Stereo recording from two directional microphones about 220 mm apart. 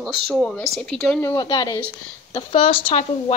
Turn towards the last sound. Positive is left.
turn(degrees=25)  # may be behind; listen again after turning